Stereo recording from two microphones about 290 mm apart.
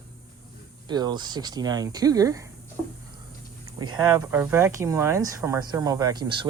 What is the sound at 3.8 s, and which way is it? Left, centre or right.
Speech, centre.